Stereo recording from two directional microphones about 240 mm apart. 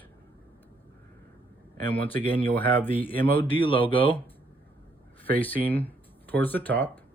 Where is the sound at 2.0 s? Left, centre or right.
Left.